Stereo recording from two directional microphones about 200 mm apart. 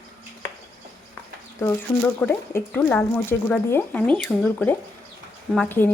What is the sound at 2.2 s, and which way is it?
Speech, 10° left (ahead or behind).